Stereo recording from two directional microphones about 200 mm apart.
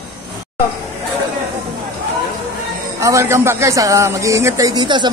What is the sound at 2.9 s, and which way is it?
Speech, 15° right (ahead or behind).